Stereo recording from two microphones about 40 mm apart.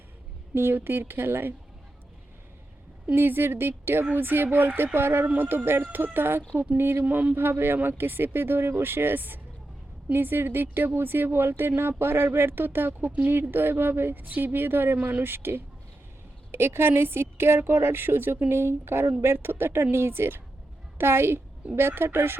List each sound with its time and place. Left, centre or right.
0.5 s speech: right
3.2 s speech: right
6.1 s speech: right
7.0 s a sound: right
7.3 s speech: right
11.8 s speech: right
14.3 s speech: right
14.9 s speech: right
15.2 s speech: right
16.5 s a woman's voice: right
21.0 s a woman's voice: right